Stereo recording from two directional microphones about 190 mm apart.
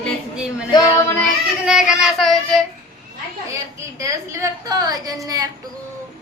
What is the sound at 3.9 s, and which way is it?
A woman's voice, 15° right (ahead or behind).